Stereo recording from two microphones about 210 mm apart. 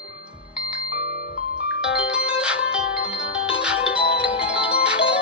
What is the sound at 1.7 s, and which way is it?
Music, 5° right (ahead or behind).